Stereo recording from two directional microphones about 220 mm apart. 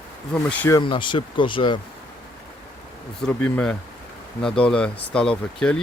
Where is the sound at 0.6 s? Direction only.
15° left (ahead or behind).